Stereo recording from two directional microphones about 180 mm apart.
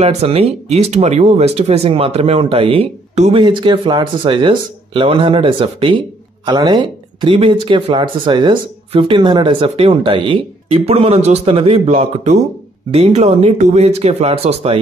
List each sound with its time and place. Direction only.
0.0 s speech: 35° right (ahead or behind)